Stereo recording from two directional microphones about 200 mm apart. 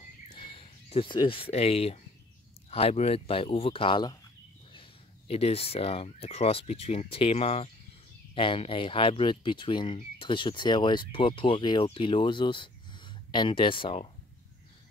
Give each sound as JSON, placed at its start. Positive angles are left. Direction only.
{"t": 0.4, "sound": "speech", "side_deg": 25}
{"t": 5.3, "sound": "speech", "side_deg": 30}